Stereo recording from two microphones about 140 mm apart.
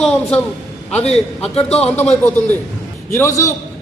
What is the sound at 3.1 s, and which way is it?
Speech, 20° left (ahead or behind).